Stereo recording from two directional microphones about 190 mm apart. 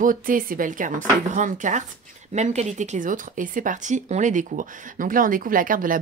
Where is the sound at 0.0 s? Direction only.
45° right (ahead or behind).